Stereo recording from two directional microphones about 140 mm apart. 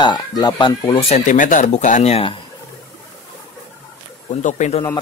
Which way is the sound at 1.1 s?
65° left (ahead or behind).